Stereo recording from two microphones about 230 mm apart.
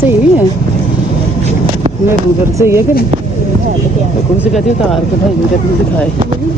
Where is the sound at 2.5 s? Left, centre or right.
Centre.